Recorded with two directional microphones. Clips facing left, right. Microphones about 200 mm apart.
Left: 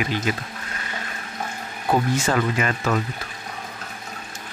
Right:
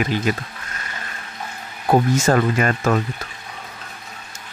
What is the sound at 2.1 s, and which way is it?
Speech, 45° right (ahead or behind).